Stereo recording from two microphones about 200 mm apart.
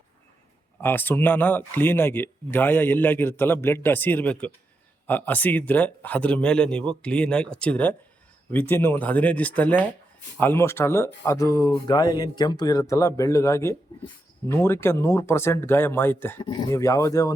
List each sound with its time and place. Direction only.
0.8 s speech: 10° left (ahead or behind)